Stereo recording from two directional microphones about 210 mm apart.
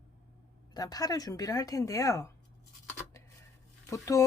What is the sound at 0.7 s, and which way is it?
Speech, 20° left (ahead or behind).